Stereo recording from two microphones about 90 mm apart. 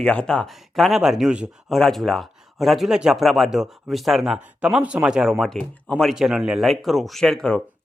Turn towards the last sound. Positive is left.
turn(degrees=5)  # may be behind; listen again after turning